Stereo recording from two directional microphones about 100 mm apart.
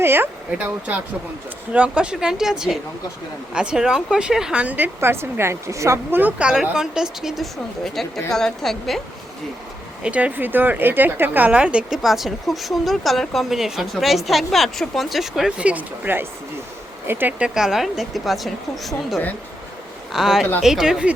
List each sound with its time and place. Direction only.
0.0 s speech: 20° right (ahead or behind)
6.5 s a woman's voice: 5° right (ahead or behind)
10.0 s a woman's voice: 15° right (ahead or behind)
17.4 s a woman's voice: 5° right (ahead or behind)